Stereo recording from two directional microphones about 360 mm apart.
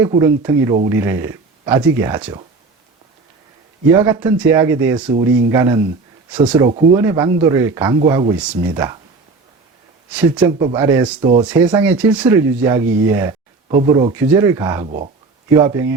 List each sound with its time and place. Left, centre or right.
0.0 s speech: centre
3.9 s speech: centre
10.1 s speech: centre
11.4 s speech: centre
14.8 s speech: centre
15.5 s speech: centre